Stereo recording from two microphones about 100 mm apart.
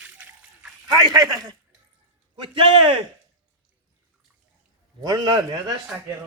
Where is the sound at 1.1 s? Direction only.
40° right (ahead or behind).